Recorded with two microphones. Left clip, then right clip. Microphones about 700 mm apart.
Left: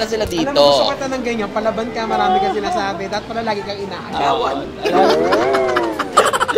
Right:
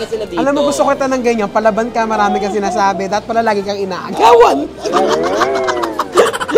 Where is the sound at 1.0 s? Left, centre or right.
Right.